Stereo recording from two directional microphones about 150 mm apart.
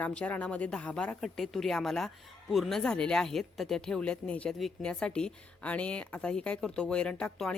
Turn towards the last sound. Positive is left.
turn(degrees=5)  # may be behind; listen again after turning